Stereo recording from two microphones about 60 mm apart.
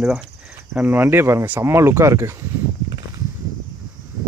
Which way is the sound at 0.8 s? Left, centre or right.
Right.